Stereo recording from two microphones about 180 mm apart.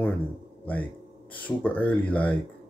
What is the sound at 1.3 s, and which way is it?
Speech, 10° left (ahead or behind).